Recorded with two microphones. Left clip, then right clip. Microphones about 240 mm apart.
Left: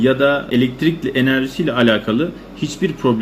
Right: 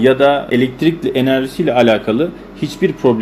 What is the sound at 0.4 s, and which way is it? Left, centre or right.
Speech, centre.